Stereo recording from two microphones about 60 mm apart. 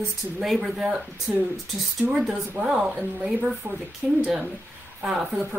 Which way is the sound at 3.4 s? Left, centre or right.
Centre.